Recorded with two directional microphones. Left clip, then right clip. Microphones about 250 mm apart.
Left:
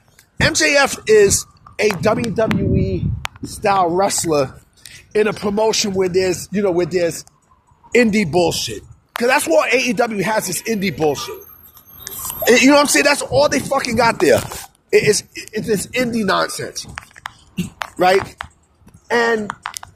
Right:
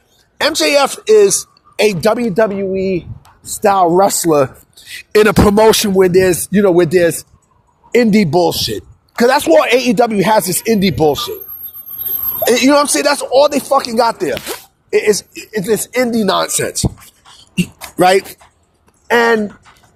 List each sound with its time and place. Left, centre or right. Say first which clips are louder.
0.3 s speech: right 2 dB; centre
1.7 s music: right 4 dB; right
3.6 s speech: right 5 dB; right
5.1 s music: right 8 dB; right
7.9 s speech: right 3 dB; right
12.4 s speech: right 1 dB; centre
17.5 s a sound: right 5 dB; right
17.9 s speech: right 4 dB; right